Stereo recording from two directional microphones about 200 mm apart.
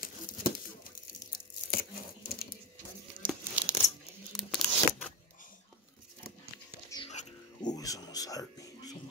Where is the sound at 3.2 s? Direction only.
5° right (ahead or behind).